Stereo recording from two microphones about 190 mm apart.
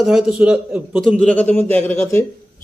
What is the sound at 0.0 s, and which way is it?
Speech, 5° right (ahead or behind).